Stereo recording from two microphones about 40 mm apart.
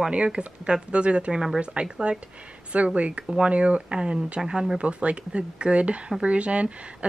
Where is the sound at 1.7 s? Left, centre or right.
Right.